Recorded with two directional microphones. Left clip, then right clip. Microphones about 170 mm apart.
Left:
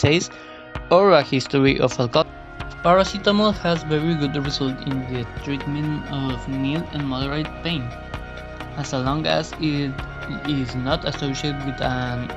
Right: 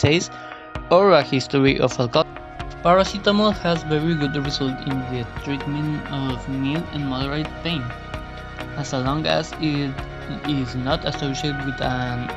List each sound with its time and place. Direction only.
0.0 s speech: 15° right (ahead or behind)